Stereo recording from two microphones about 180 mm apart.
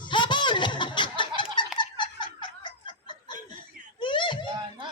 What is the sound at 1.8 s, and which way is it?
Snicker, 25° left (ahead or behind).